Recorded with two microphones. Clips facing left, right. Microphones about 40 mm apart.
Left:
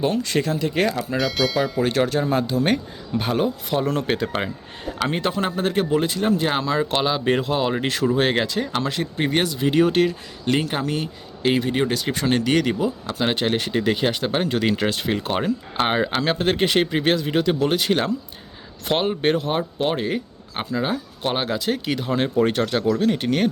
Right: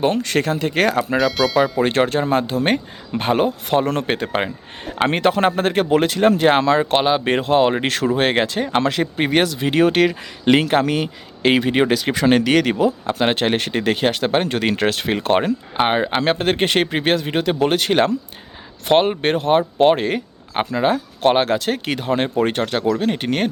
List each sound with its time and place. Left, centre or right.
0.0 s speech: right
1.1 s speech: centre
1.8 s speech: right
4.0 s speech: right
5.0 s speech: right
6.9 s speech: right
8.8 s speech: right
9.6 s speech: right
10.0 s speech: right
13.1 s speech: right
15.8 s speech: right
16.2 s speech: right